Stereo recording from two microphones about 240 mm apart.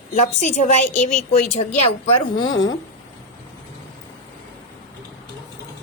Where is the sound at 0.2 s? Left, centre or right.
Left.